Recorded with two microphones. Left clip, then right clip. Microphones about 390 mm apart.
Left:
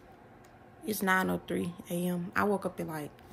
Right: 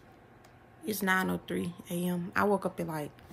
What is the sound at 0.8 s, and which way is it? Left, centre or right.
Speech, centre.